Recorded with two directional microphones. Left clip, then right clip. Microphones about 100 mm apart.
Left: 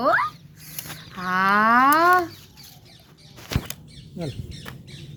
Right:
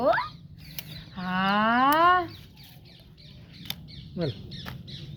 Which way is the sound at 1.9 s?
15° right (ahead or behind).